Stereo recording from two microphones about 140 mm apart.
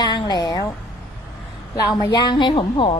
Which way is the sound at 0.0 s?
30° left (ahead or behind).